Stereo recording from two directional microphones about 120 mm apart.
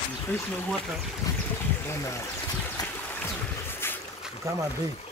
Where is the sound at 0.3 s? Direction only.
15° left (ahead or behind).